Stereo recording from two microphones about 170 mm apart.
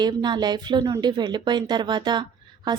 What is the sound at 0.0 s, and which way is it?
A woman's voice, 25° right (ahead or behind).